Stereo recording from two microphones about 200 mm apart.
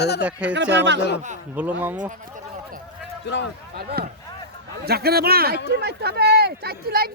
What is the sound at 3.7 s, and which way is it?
Speech, 50° right (ahead or behind).